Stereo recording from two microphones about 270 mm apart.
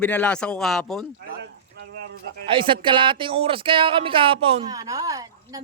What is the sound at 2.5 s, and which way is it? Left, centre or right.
Speech, centre.